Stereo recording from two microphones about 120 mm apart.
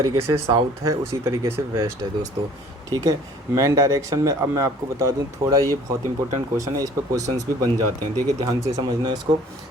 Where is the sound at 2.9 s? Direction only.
30° right (ahead or behind).